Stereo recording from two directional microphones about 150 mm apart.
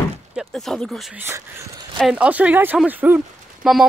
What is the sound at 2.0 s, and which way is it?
Speech, 5° right (ahead or behind).